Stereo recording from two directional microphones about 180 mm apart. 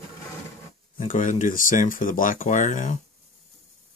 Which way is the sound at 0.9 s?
45° left (ahead or behind).